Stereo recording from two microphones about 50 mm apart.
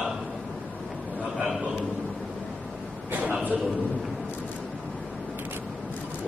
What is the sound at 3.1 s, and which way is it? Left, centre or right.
Speech, right.